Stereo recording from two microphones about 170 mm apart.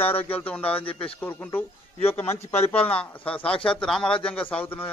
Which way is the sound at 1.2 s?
10° left (ahead or behind).